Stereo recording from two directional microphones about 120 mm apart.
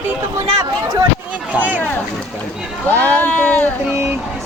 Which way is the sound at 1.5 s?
15° right (ahead or behind).